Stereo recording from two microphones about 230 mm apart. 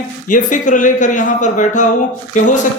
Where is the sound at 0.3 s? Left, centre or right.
Left.